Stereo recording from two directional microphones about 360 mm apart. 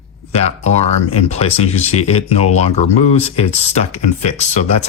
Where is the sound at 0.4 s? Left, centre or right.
Centre.